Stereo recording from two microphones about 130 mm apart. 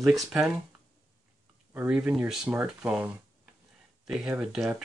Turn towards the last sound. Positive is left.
turn(degrees=-5)  # may be behind; listen again after turning